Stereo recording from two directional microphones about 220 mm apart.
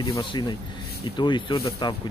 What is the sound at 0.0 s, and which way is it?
Speech, 20° left (ahead or behind).